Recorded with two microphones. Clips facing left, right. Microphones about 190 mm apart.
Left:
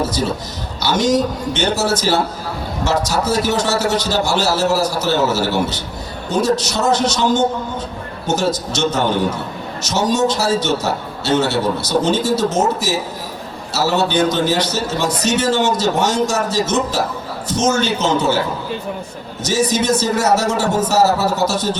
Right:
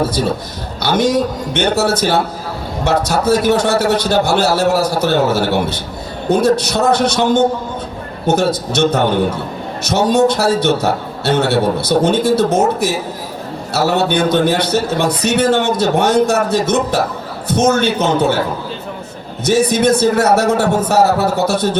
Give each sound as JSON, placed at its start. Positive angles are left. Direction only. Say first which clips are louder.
{"t": 0.8, "sound": "a man's voice", "louder": "right 2 dB", "side_deg": -55}
{"t": 19.5, "sound": "a man's voice", "louder": "right 4 dB", "side_deg": -60}